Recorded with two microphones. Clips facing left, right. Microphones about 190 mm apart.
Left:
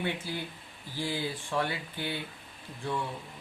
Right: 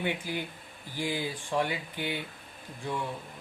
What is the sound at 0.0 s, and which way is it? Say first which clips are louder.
Speech: right 1 dB; 15° right (ahead or behind).